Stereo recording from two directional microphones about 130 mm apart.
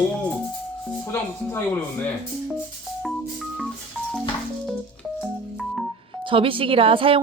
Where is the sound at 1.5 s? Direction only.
15° left (ahead or behind).